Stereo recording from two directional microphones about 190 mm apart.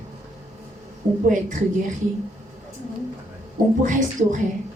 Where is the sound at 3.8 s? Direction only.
40° right (ahead or behind).